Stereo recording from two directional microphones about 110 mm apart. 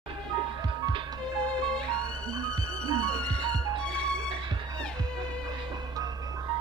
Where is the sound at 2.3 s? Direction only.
35° right (ahead or behind).